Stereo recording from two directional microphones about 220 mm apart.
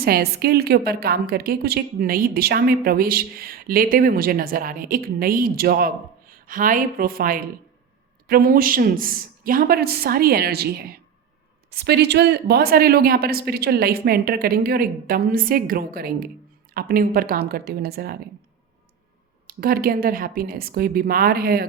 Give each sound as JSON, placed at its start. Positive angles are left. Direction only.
{"t": 0.0, "sound": "a woman's voice", "side_deg": -45}
{"t": 19.5, "sound": "a woman's voice", "side_deg": -40}